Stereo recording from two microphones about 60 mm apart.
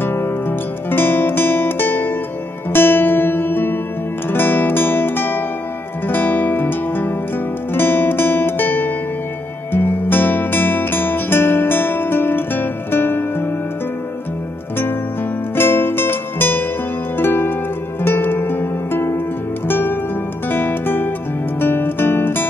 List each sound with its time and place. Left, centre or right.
0.0 s music: left
7.7 s guitar: left
9.7 s music: left
15.5 s music: left